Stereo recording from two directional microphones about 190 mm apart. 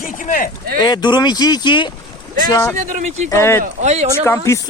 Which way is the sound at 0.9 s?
20° left (ahead or behind).